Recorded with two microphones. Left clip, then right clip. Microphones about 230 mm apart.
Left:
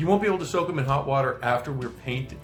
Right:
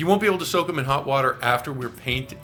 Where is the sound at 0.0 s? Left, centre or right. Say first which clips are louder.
Right 3 dB; right.